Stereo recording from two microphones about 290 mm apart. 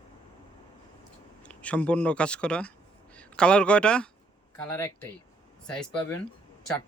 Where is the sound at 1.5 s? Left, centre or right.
Centre.